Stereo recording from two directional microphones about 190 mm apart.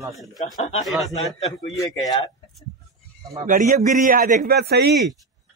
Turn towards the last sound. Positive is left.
turn(degrees=-60)  # may be behind; listen again after turning